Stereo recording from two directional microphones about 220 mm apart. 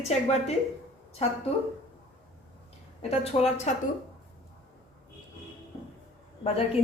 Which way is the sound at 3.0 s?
25° left (ahead or behind).